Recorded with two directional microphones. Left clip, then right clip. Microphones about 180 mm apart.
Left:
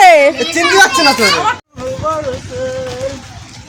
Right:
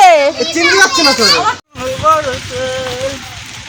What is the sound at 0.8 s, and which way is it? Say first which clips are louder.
Speech: left 2 dB; 30° left (ahead or behind).